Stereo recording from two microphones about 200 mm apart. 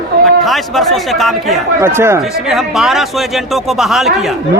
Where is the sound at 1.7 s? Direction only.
10° right (ahead or behind).